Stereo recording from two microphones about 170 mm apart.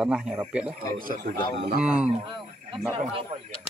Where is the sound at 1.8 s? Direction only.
5° right (ahead or behind).